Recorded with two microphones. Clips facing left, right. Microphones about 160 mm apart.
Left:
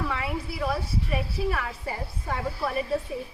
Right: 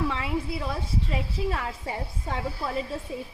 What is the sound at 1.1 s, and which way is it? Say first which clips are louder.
Speech: left 2 dB; 20° right (ahead or behind).